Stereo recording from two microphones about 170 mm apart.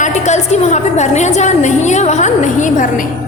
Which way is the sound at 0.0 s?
45° left (ahead or behind).